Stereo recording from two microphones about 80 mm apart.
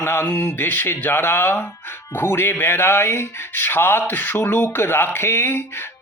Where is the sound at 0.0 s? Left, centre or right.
Left.